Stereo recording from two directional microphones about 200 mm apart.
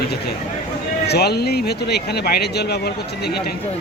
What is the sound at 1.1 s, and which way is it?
Speech, 55° left (ahead or behind).